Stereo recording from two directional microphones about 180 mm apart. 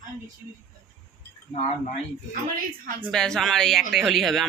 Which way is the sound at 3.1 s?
5° left (ahead or behind).